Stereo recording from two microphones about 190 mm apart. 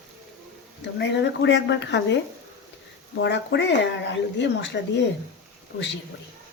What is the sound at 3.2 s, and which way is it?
Speech, 65° left (ahead or behind).